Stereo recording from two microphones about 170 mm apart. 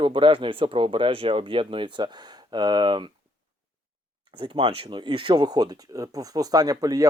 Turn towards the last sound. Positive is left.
turn(degrees=-20)  # may be behind; listen again after turning